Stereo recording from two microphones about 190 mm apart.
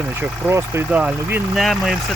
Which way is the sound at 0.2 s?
15° right (ahead or behind).